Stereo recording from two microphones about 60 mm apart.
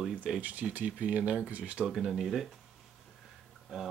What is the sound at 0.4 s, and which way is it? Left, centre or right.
Speech, right.